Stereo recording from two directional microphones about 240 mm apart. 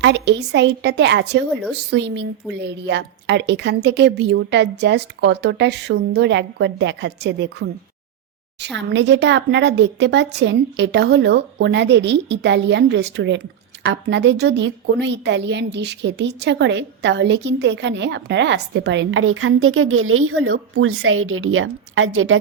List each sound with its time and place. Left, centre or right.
0.0 s a woman's voice: right
8.9 s a woman's voice: right